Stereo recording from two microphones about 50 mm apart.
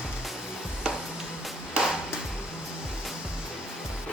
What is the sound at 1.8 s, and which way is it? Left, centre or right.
Music, right.